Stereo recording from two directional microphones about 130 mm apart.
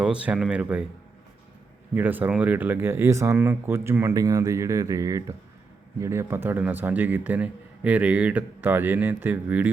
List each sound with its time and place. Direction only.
0.0 s speech: 10° right (ahead or behind)
2.0 s speech: 15° right (ahead or behind)